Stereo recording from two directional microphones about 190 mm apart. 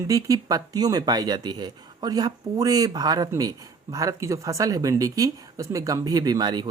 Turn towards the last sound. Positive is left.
turn(degrees=-20)  # may be behind; listen again after turning